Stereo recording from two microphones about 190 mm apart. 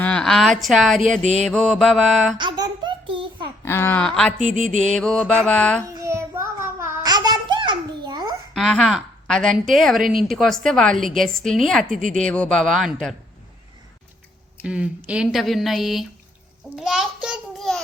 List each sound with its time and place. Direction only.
0.0 s a woman's voice: 5° left (ahead or behind)
1.2 s a sound: 35° right (ahead or behind)
1.5 s a woman's voice: 5° left (ahead or behind)
2.4 s baby laughter: 25° right (ahead or behind)
3.6 s speech: 15° left (ahead or behind)
4.4 s a sound: 40° right (ahead or behind)
4.9 s a woman's voice: 5° left (ahead or behind)
5.9 s child singing: 15° right (ahead or behind)
8.5 s a woman's voice: centre (ahead or behind)
12.0 s a sound: 40° right (ahead or behind)
12.3 s a woman's voice: 5° left (ahead or behind)
14.6 s a woman's voice: 5° right (ahead or behind)